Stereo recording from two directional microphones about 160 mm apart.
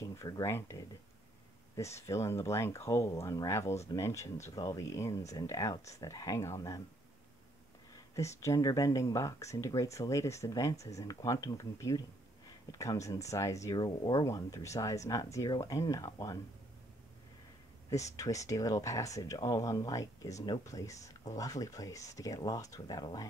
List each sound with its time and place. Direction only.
0.0 s speech: 20° left (ahead or behind)
7.9 s speech: 20° left (ahead or behind)
17.8 s speech: 20° left (ahead or behind)